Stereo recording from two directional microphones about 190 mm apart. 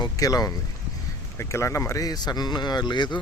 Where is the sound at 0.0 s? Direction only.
20° left (ahead or behind).